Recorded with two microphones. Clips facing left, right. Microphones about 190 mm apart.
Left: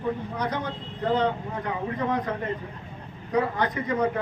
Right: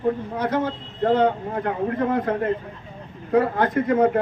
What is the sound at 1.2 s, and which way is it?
A man's voice, 55° right (ahead or behind).